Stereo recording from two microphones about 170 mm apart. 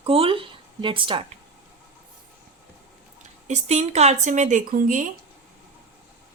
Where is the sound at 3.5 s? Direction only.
40° right (ahead or behind).